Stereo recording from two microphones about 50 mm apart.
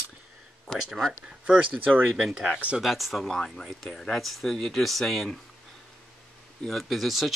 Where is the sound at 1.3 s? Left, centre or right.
Right.